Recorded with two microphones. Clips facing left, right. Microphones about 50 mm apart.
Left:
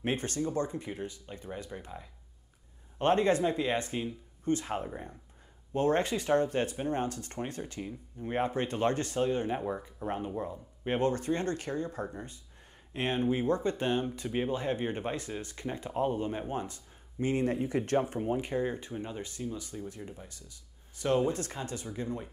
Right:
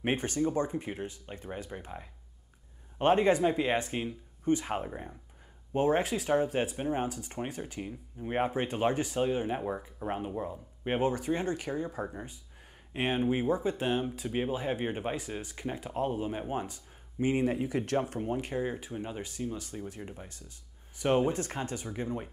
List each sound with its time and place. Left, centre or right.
0.0 s speech: right
20.0 s speech: right
22.0 s speech: right